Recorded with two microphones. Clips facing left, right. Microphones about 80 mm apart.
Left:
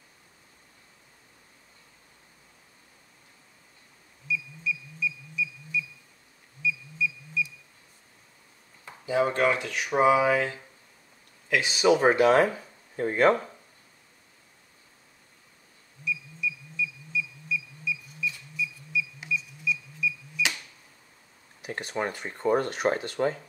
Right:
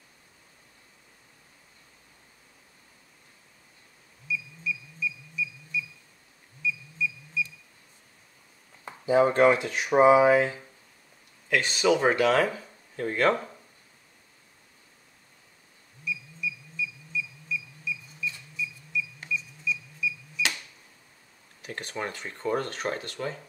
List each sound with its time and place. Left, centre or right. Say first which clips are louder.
4.3 s music: left 1 dB; centre
6.6 s a sound: left 1 dB; centre
8.8 s speech: right 4 dB; right
11.4 s speech: even; centre
11.8 s speech: left 3 dB; centre
16.0 s music: left 2 dB; centre
18.9 s a sound: left 1 dB; centre
20.3 s cash register: even; centre
21.5 s a sound: left 3 dB; centre
21.9 s speech: left 4 dB; centre
23.2 s speech: left 8 dB; left